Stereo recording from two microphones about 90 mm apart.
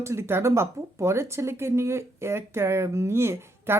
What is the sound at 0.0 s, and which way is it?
A woman's voice, 30° right (ahead or behind).